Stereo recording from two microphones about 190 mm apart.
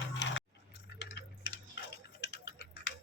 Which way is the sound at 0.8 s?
65° left (ahead or behind).